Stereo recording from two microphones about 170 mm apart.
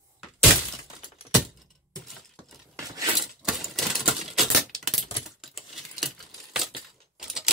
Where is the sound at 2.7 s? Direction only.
20° right (ahead or behind).